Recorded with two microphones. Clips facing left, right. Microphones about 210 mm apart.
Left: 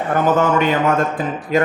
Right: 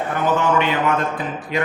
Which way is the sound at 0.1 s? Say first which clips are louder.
Left 4 dB; 45° left (ahead or behind).